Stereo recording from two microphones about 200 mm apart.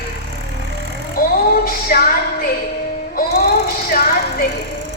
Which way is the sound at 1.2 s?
45° left (ahead or behind).